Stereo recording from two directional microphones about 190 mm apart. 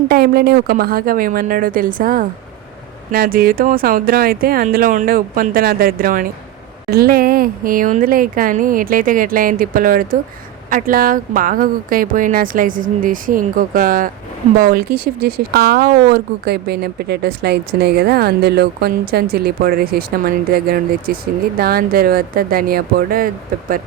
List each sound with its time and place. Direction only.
0.1 s speech: 55° right (ahead or behind)